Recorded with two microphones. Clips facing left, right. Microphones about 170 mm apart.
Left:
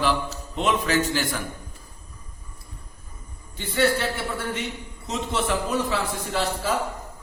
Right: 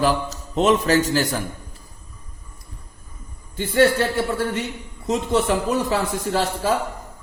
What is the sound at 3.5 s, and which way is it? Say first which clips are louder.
A man's voice: right 6 dB; 45° right (ahead or behind).